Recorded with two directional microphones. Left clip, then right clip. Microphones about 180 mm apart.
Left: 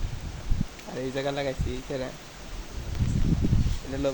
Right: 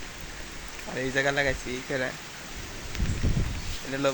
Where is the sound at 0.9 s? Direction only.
10° left (ahead or behind).